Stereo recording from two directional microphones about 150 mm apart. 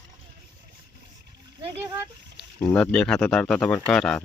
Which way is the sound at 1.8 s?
20° right (ahead or behind).